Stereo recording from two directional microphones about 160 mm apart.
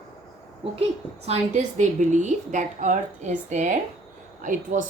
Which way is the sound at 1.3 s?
50° right (ahead or behind).